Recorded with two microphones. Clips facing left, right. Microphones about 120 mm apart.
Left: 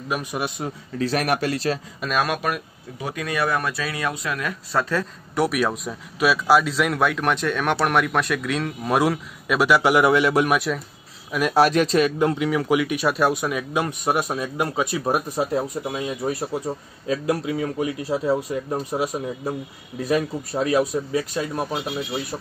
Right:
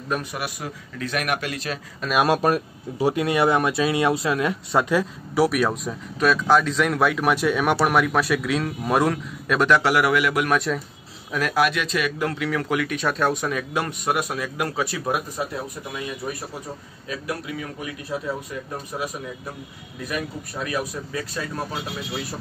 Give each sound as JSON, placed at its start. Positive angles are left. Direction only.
{"t": 0.1, "sound": "a man's voice", "side_deg": 15}
{"t": 2.2, "sound": "speech", "side_deg": -30}
{"t": 5.3, "sound": "a man's voice", "side_deg": 0}
{"t": 10.5, "sound": "a man's voice", "side_deg": 5}
{"t": 11.5, "sound": "a man's voice", "side_deg": 35}
{"t": 12.3, "sound": "speech", "side_deg": 15}
{"t": 15.0, "sound": "a man's voice", "side_deg": 35}
{"t": 15.8, "sound": "speech", "side_deg": 25}